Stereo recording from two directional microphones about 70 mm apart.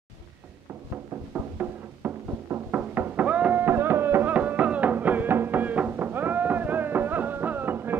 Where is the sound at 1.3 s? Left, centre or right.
Right.